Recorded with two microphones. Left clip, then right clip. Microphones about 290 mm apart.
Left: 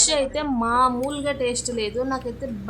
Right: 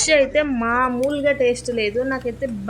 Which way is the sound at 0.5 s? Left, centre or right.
Centre.